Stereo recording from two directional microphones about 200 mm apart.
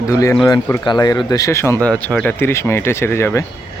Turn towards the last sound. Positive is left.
turn(degrees=15)  # may be behind; listen again after turning